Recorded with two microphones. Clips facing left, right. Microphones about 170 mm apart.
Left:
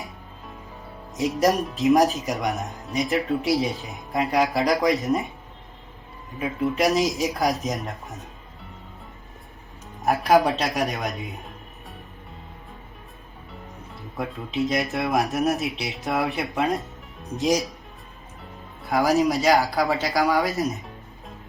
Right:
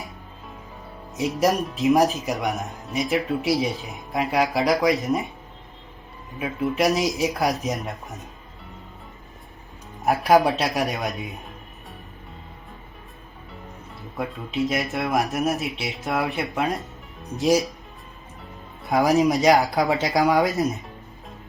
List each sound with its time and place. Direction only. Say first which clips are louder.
1.1 s speech: even; centre (ahead or behind)
6.4 s speech: even; centre (ahead or behind)
10.3 s speech: right 1 dB; centre (ahead or behind)
13.5 s speech: even; centre (ahead or behind)
18.9 s speech: right 2 dB; 20° right (ahead or behind)
20.4 s music: right 3 dB; centre (ahead or behind)